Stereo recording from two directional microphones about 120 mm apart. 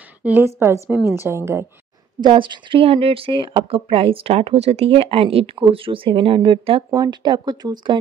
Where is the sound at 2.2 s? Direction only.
40° right (ahead or behind).